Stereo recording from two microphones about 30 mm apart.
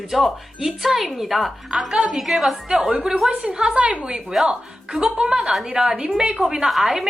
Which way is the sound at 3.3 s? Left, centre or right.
Right.